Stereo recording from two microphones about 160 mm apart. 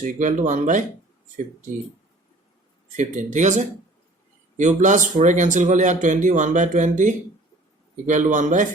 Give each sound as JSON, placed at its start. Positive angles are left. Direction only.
{"t": 0.0, "sound": "a man's voice", "side_deg": -55}
{"t": 2.9, "sound": "a man's voice", "side_deg": -50}